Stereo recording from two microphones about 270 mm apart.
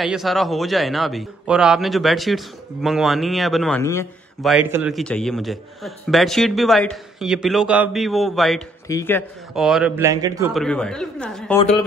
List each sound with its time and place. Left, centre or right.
0.0 s a man's voice: centre
4.4 s a man's voice: centre
10.5 s a man's voice: centre